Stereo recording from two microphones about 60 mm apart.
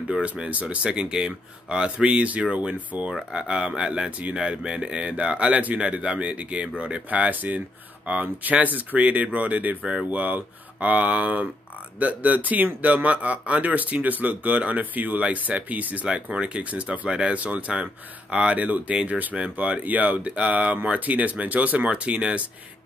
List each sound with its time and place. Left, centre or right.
0.1 s speech: centre